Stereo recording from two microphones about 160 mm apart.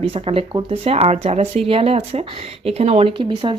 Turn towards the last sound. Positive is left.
turn(degrees=-30)  # may be behind; listen again after turning